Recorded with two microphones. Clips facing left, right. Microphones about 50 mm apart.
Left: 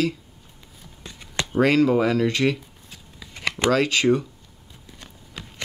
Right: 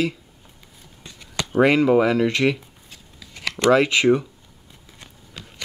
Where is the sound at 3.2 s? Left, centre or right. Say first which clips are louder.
Left 2 dB; centre.